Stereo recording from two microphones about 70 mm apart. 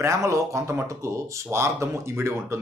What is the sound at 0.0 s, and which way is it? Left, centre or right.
Speech, right.